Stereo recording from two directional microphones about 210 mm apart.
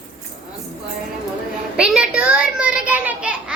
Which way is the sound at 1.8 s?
5° right (ahead or behind).